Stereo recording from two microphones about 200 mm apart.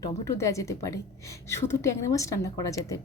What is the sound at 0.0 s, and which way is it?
A woman's voice, 15° left (ahead or behind).